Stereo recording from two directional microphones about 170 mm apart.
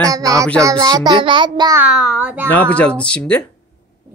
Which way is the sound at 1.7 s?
5° right (ahead or behind).